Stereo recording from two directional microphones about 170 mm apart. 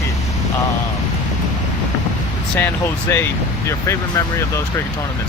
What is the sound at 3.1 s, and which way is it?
Speech, 15° left (ahead or behind).